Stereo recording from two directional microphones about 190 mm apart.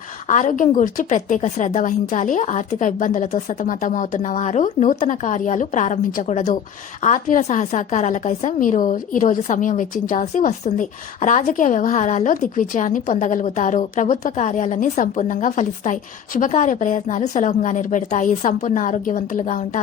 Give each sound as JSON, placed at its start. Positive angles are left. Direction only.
{"t": 0.3, "sound": "a woman's voice", "side_deg": 40}